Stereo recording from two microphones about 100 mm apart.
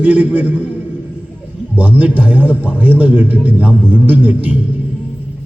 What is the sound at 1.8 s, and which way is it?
A man's voice, 15° right (ahead or behind).